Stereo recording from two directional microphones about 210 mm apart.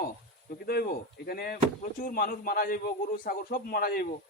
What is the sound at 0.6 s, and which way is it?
A man's voice, 45° left (ahead or behind).